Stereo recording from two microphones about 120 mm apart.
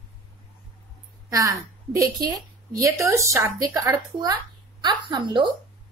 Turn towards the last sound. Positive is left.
turn(degrees=-40)  # may be behind; listen again after turning